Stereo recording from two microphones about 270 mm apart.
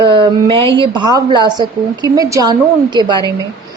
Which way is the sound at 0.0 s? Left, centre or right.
Centre.